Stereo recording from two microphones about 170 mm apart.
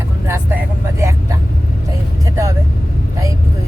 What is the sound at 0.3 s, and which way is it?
Vehicle, 15° right (ahead or behind).